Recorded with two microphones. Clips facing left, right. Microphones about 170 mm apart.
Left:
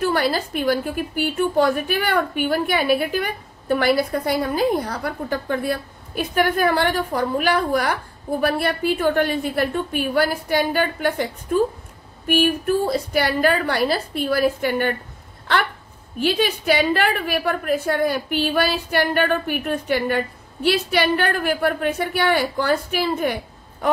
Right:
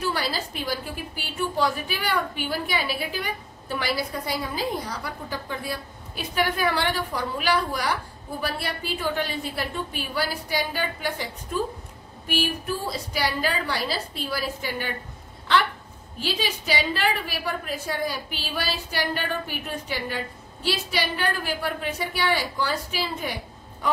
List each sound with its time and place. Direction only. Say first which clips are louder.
0.0 s a woman's voice: left 7 dB; 55° left (ahead or behind)
16.2 s a woman's voice: left 8 dB; 55° left (ahead or behind)